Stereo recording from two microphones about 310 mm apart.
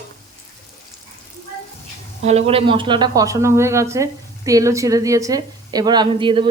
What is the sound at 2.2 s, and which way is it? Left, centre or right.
Speech, right.